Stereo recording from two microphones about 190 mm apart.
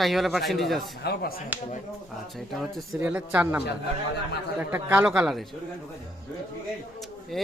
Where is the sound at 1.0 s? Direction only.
55° left (ahead or behind).